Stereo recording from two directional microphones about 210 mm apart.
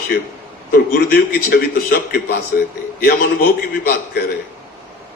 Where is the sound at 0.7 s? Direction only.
45° left (ahead or behind).